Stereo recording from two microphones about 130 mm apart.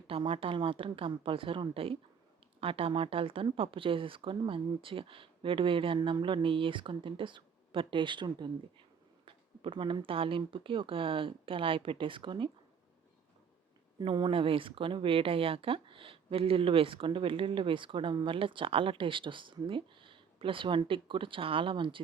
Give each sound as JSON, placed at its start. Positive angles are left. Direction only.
{"t": 0.1, "sound": "speech", "side_deg": -45}
{"t": 14.0, "sound": "speech", "side_deg": -40}